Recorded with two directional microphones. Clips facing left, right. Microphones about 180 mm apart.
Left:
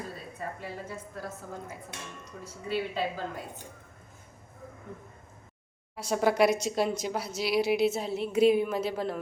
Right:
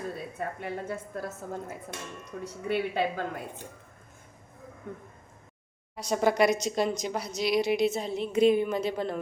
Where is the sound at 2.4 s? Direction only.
60° right (ahead or behind).